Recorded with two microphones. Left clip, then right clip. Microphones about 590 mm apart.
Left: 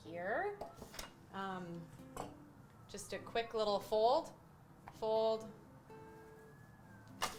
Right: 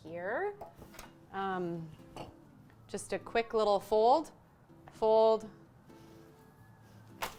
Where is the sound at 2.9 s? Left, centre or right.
Right.